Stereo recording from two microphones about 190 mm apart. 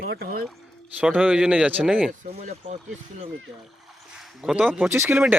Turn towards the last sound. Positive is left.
turn(degrees=-10)  # may be behind; listen again after turning